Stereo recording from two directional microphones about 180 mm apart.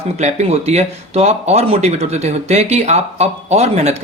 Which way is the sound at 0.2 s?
40° right (ahead or behind).